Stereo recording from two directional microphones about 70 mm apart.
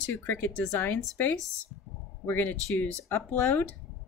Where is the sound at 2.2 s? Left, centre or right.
Left.